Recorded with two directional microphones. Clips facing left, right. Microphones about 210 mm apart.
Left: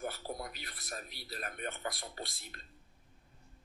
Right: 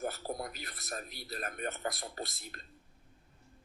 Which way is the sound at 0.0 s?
45° right (ahead or behind).